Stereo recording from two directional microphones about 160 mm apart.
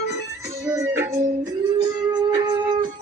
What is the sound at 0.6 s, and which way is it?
Music, 20° right (ahead or behind).